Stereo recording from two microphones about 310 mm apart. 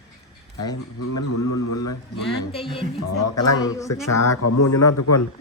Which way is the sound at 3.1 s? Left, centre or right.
Left.